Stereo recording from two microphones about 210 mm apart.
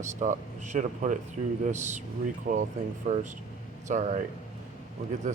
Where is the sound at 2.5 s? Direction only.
45° right (ahead or behind).